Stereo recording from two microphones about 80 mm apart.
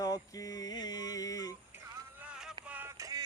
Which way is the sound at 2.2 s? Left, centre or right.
Centre.